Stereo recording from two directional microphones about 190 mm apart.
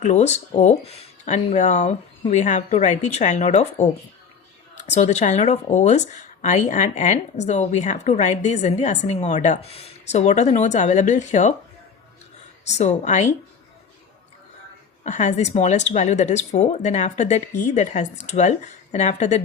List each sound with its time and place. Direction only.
0.0 s speech: 35° left (ahead or behind)
12.6 s speech: 35° left (ahead or behind)
15.0 s speech: 40° left (ahead or behind)